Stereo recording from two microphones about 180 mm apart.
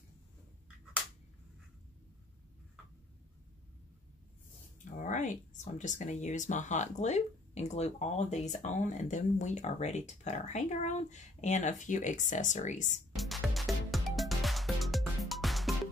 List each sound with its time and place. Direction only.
4.8 s speech: 45° left (ahead or behind)
13.1 s music: centre (ahead or behind)